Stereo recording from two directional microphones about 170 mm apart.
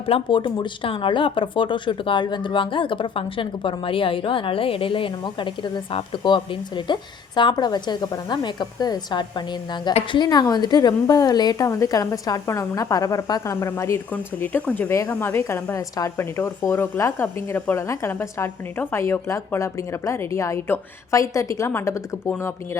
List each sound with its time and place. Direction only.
0.0 s a woman's voice: 30° left (ahead or behind)